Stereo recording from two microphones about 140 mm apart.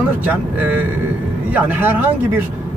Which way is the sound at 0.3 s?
10° right (ahead or behind).